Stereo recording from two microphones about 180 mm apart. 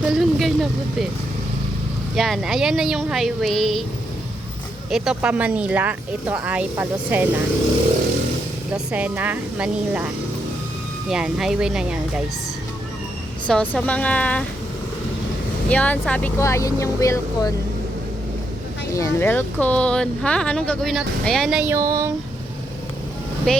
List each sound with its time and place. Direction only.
0.0 s vehicle: centre (ahead or behind)
2.1 s speech: centre (ahead or behind)
4.9 s speech: 5° right (ahead or behind)
8.9 s speech: 10° right (ahead or behind)
11.1 s speech: 5° right (ahead or behind)
13.5 s speech: 5° left (ahead or behind)
15.7 s speech: 5° left (ahead or behind)
18.9 s speech: 15° left (ahead or behind); by 22.1 s 15° right (ahead or behind)
23.5 s speech: 5° left (ahead or behind)